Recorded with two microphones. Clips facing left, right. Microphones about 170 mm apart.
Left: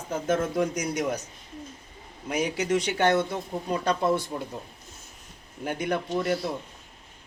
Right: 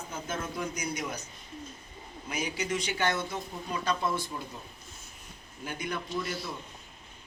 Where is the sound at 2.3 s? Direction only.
65° left (ahead or behind).